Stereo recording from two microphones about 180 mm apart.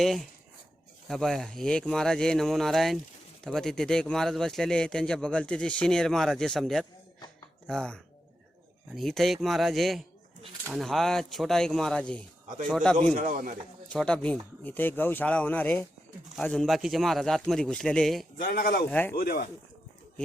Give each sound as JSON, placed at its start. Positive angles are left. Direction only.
{"t": 0.0, "sound": "a man's voice", "side_deg": 0}
{"t": 13.1, "sound": "a man's voice", "side_deg": -50}
{"t": 13.9, "sound": "a man's voice", "side_deg": 5}
{"t": 18.4, "sound": "speech", "side_deg": 55}
{"t": 18.9, "sound": "speech", "side_deg": 10}
{"t": 19.1, "sound": "speech", "side_deg": 55}